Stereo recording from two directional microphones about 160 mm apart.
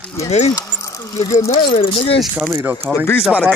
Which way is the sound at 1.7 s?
35° left (ahead or behind).